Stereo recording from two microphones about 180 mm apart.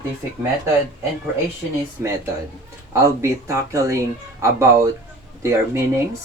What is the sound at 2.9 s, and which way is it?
Speech, 15° right (ahead or behind).